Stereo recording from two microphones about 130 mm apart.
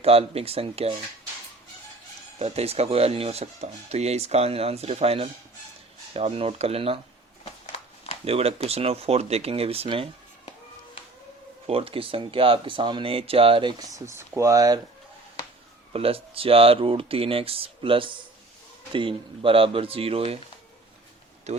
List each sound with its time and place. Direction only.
0.0 s speech: 50° right (ahead or behind)
2.4 s speech: 50° right (ahead or behind)
8.2 s speech: 50° right (ahead or behind)
11.6 s speech: 45° right (ahead or behind)
14.0 s speech: 20° right (ahead or behind)
15.9 s speech: 45° right (ahead or behind)
21.5 s speech: 60° right (ahead or behind)